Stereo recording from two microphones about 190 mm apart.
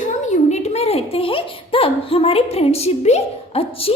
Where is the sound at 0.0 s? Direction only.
40° left (ahead or behind).